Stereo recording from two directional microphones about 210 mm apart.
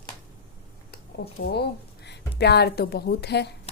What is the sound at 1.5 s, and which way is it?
A woman's voice, 50° left (ahead or behind).